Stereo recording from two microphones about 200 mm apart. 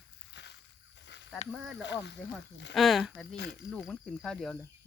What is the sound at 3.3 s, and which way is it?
Speech, 60° left (ahead or behind).